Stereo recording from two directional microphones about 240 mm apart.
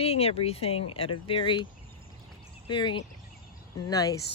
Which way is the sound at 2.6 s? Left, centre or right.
Centre.